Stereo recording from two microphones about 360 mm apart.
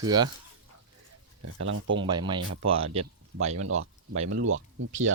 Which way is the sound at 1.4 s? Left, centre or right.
Right.